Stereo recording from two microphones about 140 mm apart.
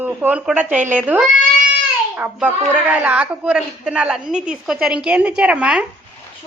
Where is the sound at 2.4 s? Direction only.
15° right (ahead or behind).